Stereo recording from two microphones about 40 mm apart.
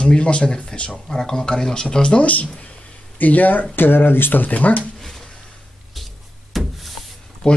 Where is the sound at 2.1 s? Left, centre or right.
Left.